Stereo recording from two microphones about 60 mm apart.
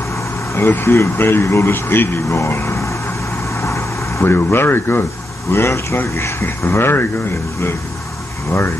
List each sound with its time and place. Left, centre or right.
0.6 s speech: left
2.2 s speech: left
3.6 s vehicle: left
4.3 s speech: left
5.5 s speech: left